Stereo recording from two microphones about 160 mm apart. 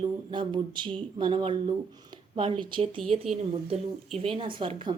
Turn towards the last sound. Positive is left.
turn(degrees=-30)  # may be behind; listen again after turning